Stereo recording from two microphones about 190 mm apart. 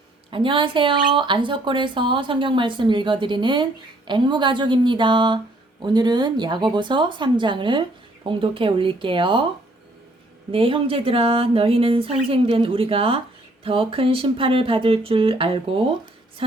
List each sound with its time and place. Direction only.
0.3 s speech: 25° right (ahead or behind)
10.5 s speech: 30° right (ahead or behind)